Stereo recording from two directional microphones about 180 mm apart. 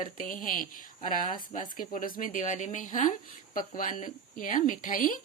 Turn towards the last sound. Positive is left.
turn(degrees=50)  # may be behind; listen again after turning